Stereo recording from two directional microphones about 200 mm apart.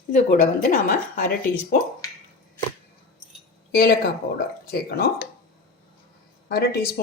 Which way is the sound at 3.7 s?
50° left (ahead or behind).